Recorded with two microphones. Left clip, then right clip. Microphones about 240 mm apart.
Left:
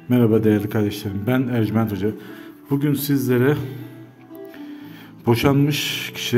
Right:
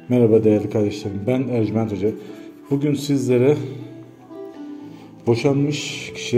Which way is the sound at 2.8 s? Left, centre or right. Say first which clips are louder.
Even; left.